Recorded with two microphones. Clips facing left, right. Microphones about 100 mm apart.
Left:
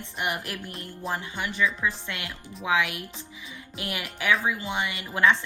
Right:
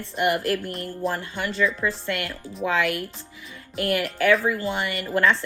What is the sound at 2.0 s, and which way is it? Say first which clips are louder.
Speech: right 7 dB; 55° right (ahead or behind).